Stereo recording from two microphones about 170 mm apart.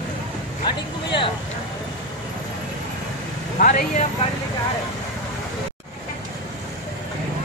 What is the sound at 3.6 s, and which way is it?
Speech, 50° left (ahead or behind).